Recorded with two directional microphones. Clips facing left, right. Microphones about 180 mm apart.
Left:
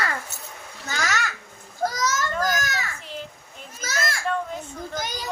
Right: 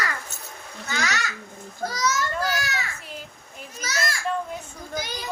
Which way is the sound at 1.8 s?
45° left (ahead or behind).